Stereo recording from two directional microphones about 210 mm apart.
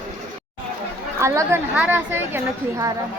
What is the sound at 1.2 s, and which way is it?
A woman's voice, 15° right (ahead or behind).